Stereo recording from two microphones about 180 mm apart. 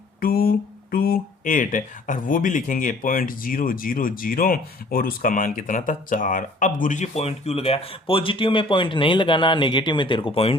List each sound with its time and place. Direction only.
0.2 s speech: 55° left (ahead or behind); by 10.6 s 30° left (ahead or behind)